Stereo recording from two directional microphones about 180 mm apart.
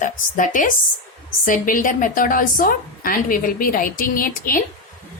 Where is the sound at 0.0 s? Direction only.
45° left (ahead or behind).